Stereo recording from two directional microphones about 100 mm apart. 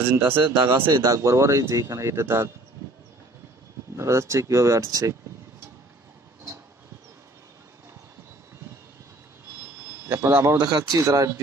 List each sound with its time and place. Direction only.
0.0 s speech: 20° right (ahead or behind)
0.9 s speech: 35° right (ahead or behind)
3.9 s speech: 30° right (ahead or behind)
9.8 s speech: 25° right (ahead or behind)
10.6 s speech: 40° right (ahead or behind)